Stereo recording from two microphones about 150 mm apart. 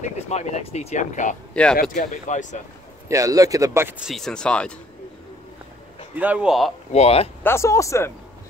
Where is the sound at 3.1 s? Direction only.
20° right (ahead or behind).